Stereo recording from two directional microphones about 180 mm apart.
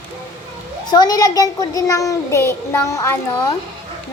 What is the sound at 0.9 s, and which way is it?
A child's voice, 20° left (ahead or behind).